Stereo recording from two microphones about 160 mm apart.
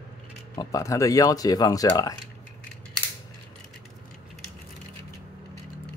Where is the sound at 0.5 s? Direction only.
20° left (ahead or behind).